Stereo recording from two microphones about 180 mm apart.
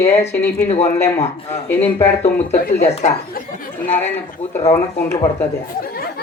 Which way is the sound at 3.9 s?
10° left (ahead or behind).